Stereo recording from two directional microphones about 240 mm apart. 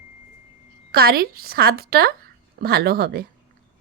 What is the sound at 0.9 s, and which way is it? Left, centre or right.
A woman's voice, right.